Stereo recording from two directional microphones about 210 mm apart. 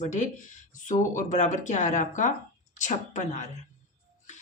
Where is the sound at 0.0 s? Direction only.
35° left (ahead or behind).